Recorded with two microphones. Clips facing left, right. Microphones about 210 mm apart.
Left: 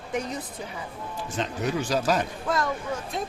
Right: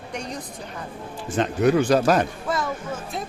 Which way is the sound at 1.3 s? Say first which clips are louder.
Right 9 dB; 60° right (ahead or behind).